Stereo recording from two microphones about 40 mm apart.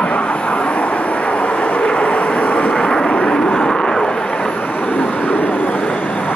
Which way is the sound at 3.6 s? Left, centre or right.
Centre.